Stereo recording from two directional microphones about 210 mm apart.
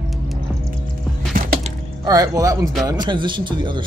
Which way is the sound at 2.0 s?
15° right (ahead or behind).